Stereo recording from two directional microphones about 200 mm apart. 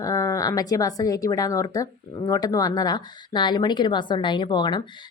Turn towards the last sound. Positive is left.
turn(degrees=20)  # may be behind; listen again after turning